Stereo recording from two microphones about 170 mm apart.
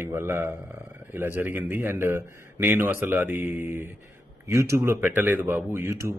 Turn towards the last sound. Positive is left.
turn(degrees=-15)  # may be behind; listen again after turning